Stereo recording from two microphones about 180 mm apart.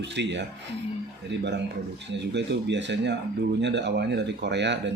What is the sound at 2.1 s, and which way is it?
Speech, 80° right.